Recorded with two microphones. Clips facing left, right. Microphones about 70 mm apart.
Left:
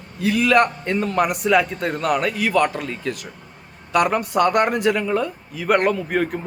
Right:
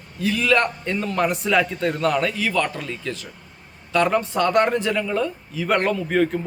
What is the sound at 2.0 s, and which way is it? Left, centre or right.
Speech, left.